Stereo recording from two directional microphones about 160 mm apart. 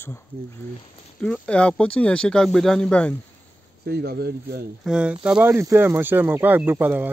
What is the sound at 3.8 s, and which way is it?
Speech, 85° right.